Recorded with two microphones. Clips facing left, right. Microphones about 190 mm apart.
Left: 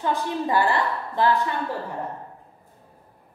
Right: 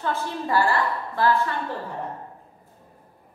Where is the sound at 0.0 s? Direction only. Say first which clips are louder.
Left 3 dB; 15° left (ahead or behind).